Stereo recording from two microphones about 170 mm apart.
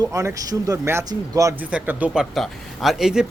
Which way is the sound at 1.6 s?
10° right (ahead or behind).